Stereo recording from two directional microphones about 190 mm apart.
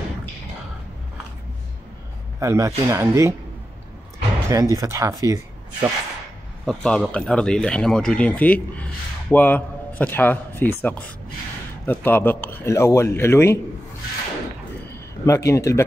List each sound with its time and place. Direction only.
2.4 s speech: 15° right (ahead or behind)
4.5 s speech: 15° right (ahead or behind)
6.6 s a man's voice: 5° left (ahead or behind)
15.2 s a man's voice: 15° left (ahead or behind)